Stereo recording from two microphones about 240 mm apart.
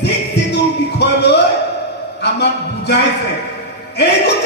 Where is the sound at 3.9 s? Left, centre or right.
Left.